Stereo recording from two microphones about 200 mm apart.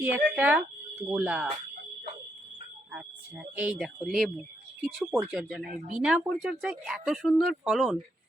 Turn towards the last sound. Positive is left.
turn(degrees=0)  # may be behind; listen again after turning